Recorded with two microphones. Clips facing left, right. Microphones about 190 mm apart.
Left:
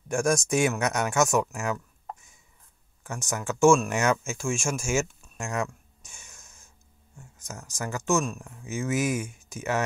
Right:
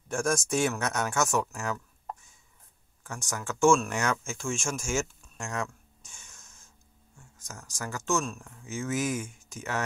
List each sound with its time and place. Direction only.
0.1 s speech: 15° left (ahead or behind)
3.0 s speech: 20° left (ahead or behind)
4.8 s a sound: 20° left (ahead or behind)
7.2 s speech: 20° left (ahead or behind)